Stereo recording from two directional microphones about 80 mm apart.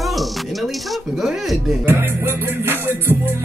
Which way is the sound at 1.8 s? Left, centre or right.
Right.